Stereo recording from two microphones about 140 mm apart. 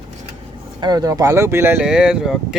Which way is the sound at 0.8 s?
30° right (ahead or behind).